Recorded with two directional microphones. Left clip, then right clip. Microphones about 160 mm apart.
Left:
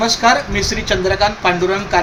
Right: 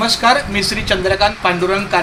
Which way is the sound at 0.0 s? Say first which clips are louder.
Even; 10° right (ahead or behind).